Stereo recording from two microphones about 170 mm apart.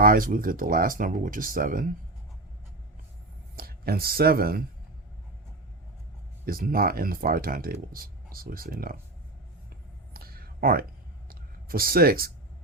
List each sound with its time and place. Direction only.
0.0 s speech: 55° right (ahead or behind)
3.5 s speech: 60° right (ahead or behind)
6.4 s speech: 60° right (ahead or behind)
10.2 s a sound: 60° right (ahead or behind)